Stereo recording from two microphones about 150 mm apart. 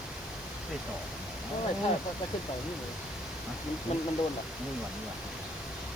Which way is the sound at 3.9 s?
50° left (ahead or behind).